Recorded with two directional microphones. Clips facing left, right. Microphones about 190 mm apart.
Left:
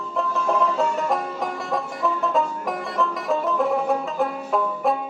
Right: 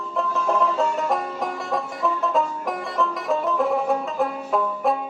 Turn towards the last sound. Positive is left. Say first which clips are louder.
# even
turn(degrees=0)  # may be behind; listen again after turning